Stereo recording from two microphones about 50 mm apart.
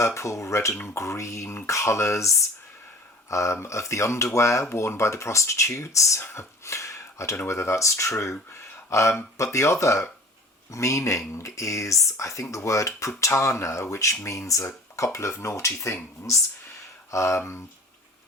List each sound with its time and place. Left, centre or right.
0.0 s speech: left
4.7 s speech: left
7.4 s speech: left
17.1 s speech: left